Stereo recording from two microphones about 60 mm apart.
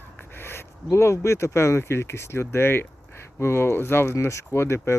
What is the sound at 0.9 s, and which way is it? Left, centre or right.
Speech, left.